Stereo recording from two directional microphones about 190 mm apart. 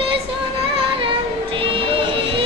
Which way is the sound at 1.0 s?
25° right (ahead or behind).